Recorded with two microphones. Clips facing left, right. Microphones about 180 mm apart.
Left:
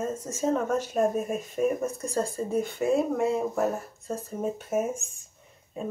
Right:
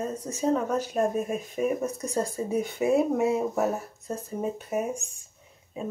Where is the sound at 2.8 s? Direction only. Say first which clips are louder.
Right 2 dB; 20° right (ahead or behind).